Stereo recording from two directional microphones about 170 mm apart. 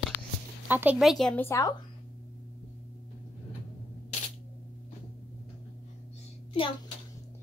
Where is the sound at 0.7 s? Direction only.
10° right (ahead or behind).